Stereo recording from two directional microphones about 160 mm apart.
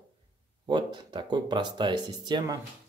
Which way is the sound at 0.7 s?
30° right (ahead or behind).